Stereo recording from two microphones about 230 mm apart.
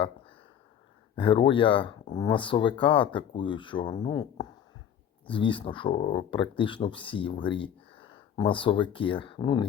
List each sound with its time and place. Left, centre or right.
1.1 s speech: left